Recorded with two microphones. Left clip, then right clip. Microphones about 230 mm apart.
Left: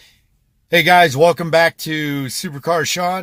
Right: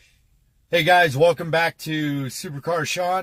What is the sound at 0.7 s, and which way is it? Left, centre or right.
Speech, left.